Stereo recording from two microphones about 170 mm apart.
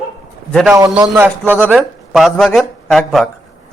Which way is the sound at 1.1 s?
10° right (ahead or behind).